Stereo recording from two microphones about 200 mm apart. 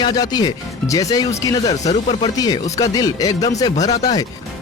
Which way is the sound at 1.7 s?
35° left (ahead or behind).